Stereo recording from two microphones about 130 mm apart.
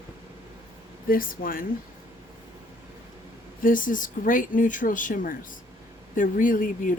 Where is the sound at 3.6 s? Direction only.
90° left.